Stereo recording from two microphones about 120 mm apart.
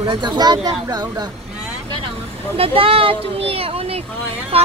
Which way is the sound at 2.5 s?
50° right (ahead or behind).